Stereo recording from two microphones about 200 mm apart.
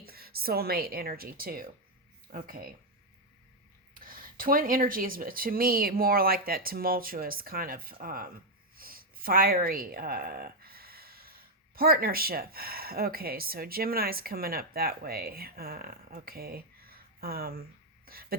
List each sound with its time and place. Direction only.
0.0 s speech: 50° right (ahead or behind)
3.9 s speech: 45° right (ahead or behind)